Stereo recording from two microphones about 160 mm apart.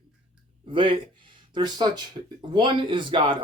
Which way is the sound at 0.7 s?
30° right (ahead or behind).